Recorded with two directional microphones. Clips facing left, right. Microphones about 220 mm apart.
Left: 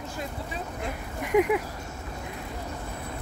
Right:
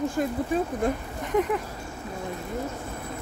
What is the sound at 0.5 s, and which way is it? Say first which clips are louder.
Speech: right 15 dB; 50° right (ahead or behind).